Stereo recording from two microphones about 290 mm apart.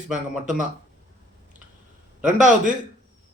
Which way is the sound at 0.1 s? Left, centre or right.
Right.